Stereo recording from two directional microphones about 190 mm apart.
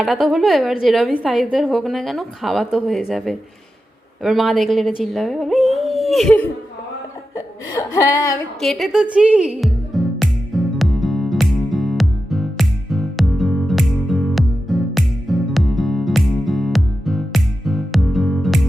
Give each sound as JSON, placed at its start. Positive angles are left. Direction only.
{"t": 0.0, "sound": "a woman's voice", "side_deg": 0}
{"t": 7.3, "sound": "speech", "side_deg": 15}
{"t": 8.6, "sound": "music", "side_deg": 0}